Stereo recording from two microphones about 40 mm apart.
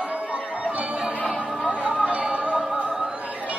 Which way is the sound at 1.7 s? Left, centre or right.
Right.